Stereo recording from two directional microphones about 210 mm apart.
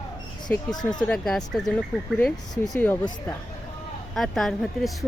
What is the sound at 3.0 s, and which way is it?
Speech, 20° left (ahead or behind).